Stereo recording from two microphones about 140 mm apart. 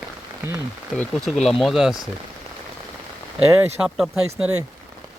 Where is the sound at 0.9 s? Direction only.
5° left (ahead or behind).